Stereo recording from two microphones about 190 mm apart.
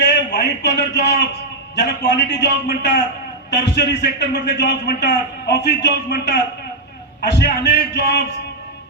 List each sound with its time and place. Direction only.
0.0 s a man's voice: 65° left (ahead or behind)
3.5 s a man's voice: 65° left (ahead or behind)